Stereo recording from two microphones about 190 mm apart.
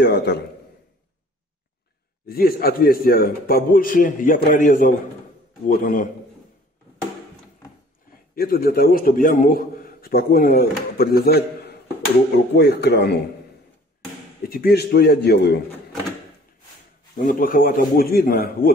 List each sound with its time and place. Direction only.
0.0 s a man's voice: 60° left (ahead or behind)
2.2 s a man's voice: 50° left (ahead or behind)
8.4 s a man's voice: 50° left (ahead or behind)
14.5 s a man's voice: 55° left (ahead or behind)
17.3 s a man's voice: 45° left (ahead or behind)